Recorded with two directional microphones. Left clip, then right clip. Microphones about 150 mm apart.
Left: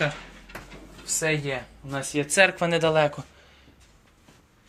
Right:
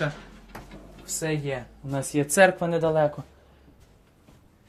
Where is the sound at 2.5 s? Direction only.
15° right (ahead or behind).